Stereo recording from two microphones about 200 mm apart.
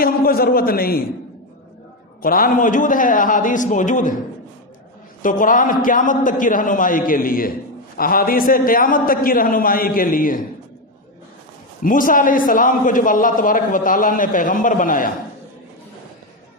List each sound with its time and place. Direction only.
0.0 s a man's voice: 45° left (ahead or behind)
2.2 s a man's voice: 45° left (ahead or behind)
5.2 s a man's voice: 40° left (ahead or behind)
11.8 s a man's voice: 40° left (ahead or behind)